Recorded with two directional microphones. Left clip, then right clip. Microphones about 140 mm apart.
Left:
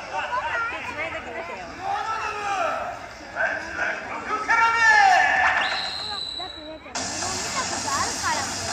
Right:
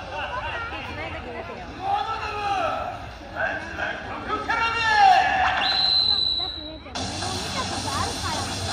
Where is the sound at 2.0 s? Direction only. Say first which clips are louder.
Even; 20° left (ahead or behind).